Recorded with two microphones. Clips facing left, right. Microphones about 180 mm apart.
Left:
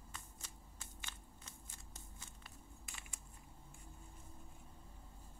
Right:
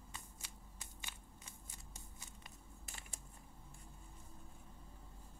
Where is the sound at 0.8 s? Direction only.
10° right (ahead or behind).